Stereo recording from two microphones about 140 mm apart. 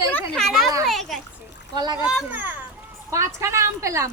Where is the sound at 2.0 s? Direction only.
5° right (ahead or behind).